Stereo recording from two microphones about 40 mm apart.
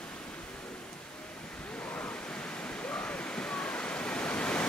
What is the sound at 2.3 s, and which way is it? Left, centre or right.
Waterfall, left.